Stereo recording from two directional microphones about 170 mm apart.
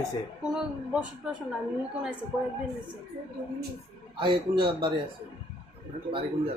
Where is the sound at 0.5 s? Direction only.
5° right (ahead or behind).